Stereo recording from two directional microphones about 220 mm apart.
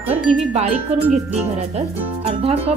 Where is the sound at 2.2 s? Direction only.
25° right (ahead or behind).